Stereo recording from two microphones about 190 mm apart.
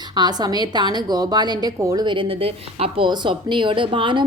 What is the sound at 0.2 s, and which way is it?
A woman's voice, 20° right (ahead or behind).